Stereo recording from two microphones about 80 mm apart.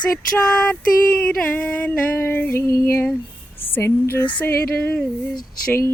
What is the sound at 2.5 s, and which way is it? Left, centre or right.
Music, left.